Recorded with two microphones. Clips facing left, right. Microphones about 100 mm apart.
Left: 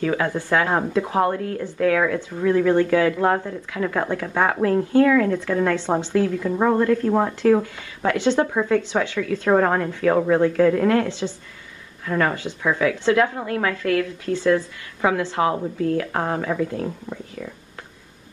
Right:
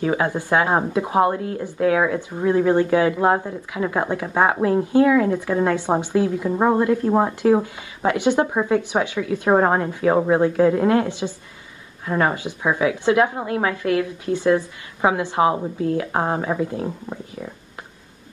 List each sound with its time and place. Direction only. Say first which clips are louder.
0.0 s a woman's voice: right 1 dB; 25° right (ahead or behind)
5.8 s a woman's voice: right 1 dB; 15° right (ahead or behind)
9.5 s a woman's voice: right 1 dB; 30° right (ahead or behind)